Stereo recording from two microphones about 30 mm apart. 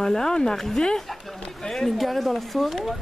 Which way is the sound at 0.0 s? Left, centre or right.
Centre.